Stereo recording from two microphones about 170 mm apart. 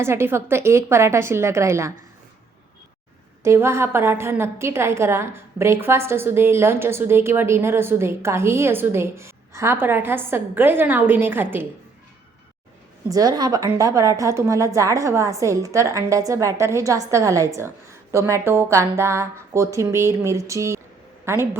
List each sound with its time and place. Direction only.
0.0 s a woman's voice: 15° right (ahead or behind)
3.4 s a woman's voice: 15° right (ahead or behind)
13.1 s a woman's voice: 20° right (ahead or behind)